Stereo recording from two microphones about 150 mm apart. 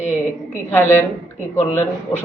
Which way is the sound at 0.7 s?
15° left (ahead or behind).